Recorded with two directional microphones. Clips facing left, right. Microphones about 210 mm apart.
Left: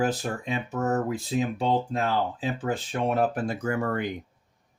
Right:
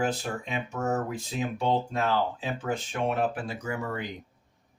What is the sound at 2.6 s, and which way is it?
Speech, 35° left (ahead or behind).